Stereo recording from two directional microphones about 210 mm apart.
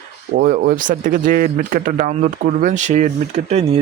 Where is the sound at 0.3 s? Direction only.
45° right (ahead or behind).